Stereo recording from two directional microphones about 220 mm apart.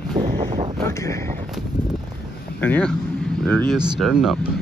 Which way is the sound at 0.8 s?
15° left (ahead or behind).